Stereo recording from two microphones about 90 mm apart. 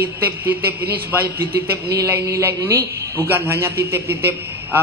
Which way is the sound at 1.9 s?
35° right (ahead or behind).